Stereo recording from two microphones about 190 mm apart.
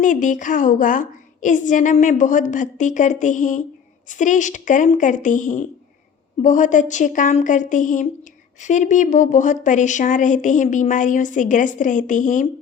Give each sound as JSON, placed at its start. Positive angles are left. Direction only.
{"t": 0.0, "sound": "speech", "side_deg": 40}